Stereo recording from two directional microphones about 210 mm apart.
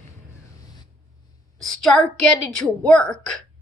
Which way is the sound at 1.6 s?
Centre (ahead or behind).